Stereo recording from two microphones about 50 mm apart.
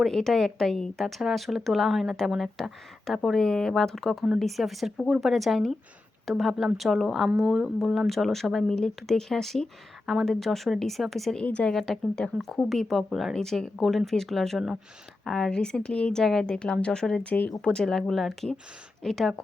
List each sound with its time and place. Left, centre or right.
0.0 s a woman's voice: centre
1.0 s speech: centre
2.6 s a woman's voice: centre
7.4 s speech: centre
7.8 s speech: centre
11.4 s a woman's voice: left
11.7 s a woman's voice: centre; by 16.2 s left
16.2 s a woman's voice: centre
17.2 s speech: left
17.6 s a woman's voice: centre